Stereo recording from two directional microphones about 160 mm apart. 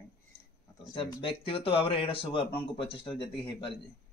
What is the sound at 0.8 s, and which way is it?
Speech, 35° left (ahead or behind).